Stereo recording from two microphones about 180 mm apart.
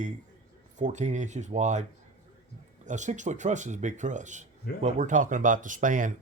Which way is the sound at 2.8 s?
40° right (ahead or behind).